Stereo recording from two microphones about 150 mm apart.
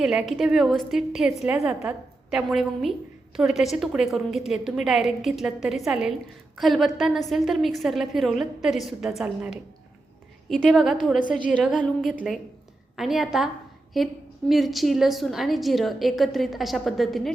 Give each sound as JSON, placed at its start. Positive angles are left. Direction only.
{"t": 0.0, "sound": "a woman's voice", "side_deg": -5}
{"t": 11.2, "sound": "a woman's voice", "side_deg": 60}
{"t": 13.0, "sound": "a woman's voice", "side_deg": 0}